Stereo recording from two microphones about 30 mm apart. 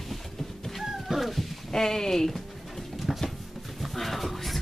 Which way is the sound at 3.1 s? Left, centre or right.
Centre.